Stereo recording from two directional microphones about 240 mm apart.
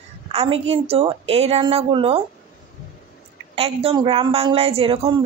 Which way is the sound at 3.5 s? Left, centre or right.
Right.